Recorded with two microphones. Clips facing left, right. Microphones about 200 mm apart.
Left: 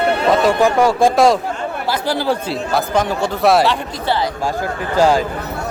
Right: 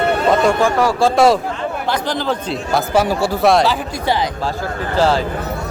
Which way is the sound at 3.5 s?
5° left (ahead or behind).